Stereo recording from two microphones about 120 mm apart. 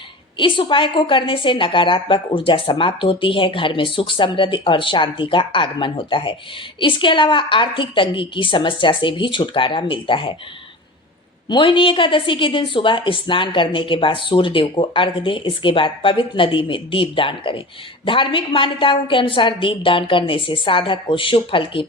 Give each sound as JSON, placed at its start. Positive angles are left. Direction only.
{"t": 0.3, "sound": "a woman's voice", "side_deg": 45}
{"t": 11.4, "sound": "a woman's voice", "side_deg": 40}